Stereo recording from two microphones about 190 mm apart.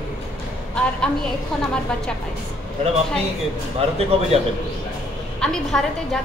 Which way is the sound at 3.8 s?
30° right (ahead or behind).